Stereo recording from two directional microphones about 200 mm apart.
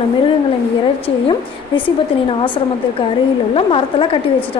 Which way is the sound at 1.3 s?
25° left (ahead or behind).